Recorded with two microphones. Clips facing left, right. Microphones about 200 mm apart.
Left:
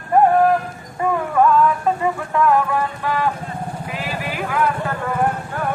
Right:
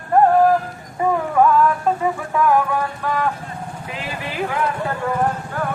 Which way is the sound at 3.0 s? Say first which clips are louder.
Even; 5° left (ahead or behind).